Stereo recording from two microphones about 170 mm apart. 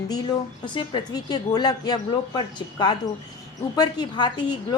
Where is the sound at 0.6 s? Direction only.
25° left (ahead or behind).